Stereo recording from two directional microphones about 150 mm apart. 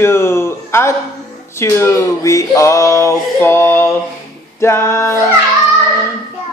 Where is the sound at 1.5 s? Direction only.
15° left (ahead or behind).